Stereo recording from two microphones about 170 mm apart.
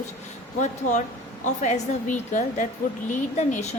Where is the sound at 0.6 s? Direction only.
45° left (ahead or behind).